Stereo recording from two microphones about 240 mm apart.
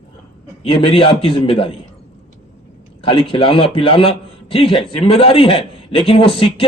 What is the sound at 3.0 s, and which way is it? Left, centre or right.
A man's voice, left.